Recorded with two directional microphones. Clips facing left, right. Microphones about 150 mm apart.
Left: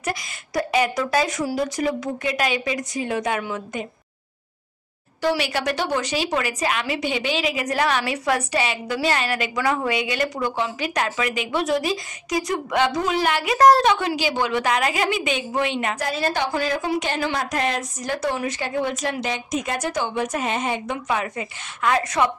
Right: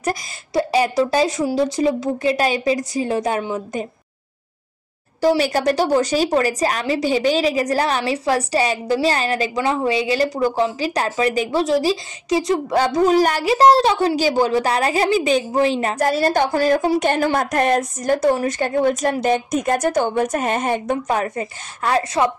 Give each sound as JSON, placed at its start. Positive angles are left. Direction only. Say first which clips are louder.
{"t": 0.5, "sound": "speech", "louder": "right 3 dB", "side_deg": -30}
{"t": 5.4, "sound": "speech", "louder": "right 6 dB", "side_deg": -40}
{"t": 16.0, "sound": "a woman's voice", "louder": "right 9 dB", "side_deg": -45}